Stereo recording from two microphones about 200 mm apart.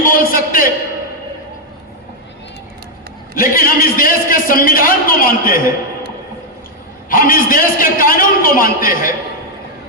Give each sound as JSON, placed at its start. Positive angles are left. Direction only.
{"t": 0.0, "sound": "a man's voice", "side_deg": 45}
{"t": 3.3, "sound": "a man's voice", "side_deg": 45}
{"t": 7.1, "sound": "a man's voice", "side_deg": 45}